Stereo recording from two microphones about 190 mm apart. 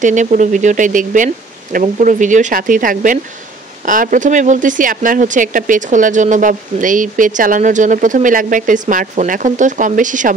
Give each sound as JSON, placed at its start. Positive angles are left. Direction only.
{"t": 0.0, "sound": "speech", "side_deg": -40}